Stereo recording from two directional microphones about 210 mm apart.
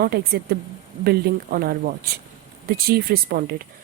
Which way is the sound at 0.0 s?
50° right (ahead or behind).